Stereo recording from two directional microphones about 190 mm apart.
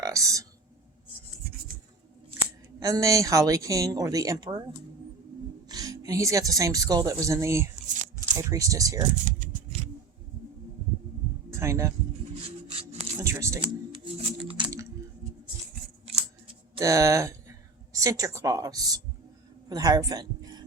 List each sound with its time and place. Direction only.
0.0 s speech: 15° right (ahead or behind)
1.5 s rub: 55° right (ahead or behind)
2.8 s speech: 15° right (ahead or behind)
5.6 s speech: 20° right (ahead or behind)
9.4 s a sound: 45° right (ahead or behind)
11.5 s speech: 15° right (ahead or behind)
12.4 s a sound: 30° right (ahead or behind)
13.2 s music: 15° right (ahead or behind)
13.6 s music: 25° right (ahead or behind)
16.0 s scissors: 30° right (ahead or behind)
16.8 s a man's voice: 15° right (ahead or behind)